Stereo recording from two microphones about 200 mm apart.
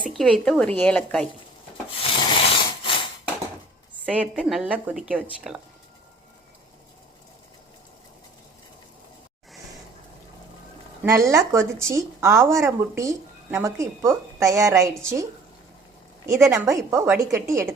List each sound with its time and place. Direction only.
0.1 s a woman's voice: centre (ahead or behind)
2.0 s rub: 25° left (ahead or behind)
2.8 s a sound: 25° left (ahead or behind)
4.0 s a woman's voice: 5° right (ahead or behind)
11.0 s speech: 15° right (ahead or behind)